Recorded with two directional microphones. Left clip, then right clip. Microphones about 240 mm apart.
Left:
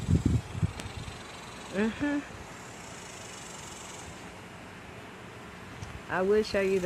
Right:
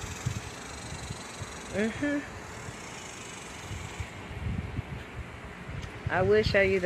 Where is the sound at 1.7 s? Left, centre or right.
Centre.